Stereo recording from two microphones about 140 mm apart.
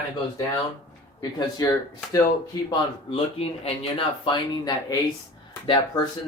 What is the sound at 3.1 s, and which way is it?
Speech, 40° left (ahead or behind).